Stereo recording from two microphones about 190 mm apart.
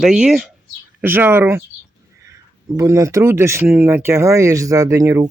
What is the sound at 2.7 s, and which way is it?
Speech, 15° right (ahead or behind).